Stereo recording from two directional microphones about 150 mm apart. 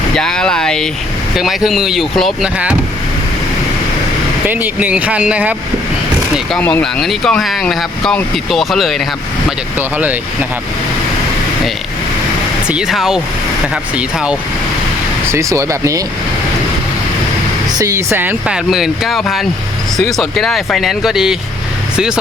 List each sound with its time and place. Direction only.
0.1 s speech: 5° left (ahead or behind)
4.4 s speech: 10° right (ahead or behind)
6.6 s speech: 10° left (ahead or behind)
9.7 s speech: 10° right (ahead or behind)
12.6 s speech: 5° right (ahead or behind)
15.3 s speech: 20° right (ahead or behind)
17.7 s speech: 20° right (ahead or behind); by 22.2 s 5° right (ahead or behind)